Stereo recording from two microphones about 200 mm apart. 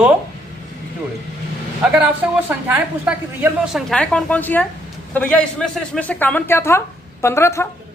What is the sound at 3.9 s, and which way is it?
A man's voice, 5° left (ahead or behind).